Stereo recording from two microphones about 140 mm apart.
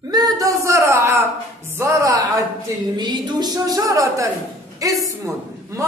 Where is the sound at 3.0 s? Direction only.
30° right (ahead or behind).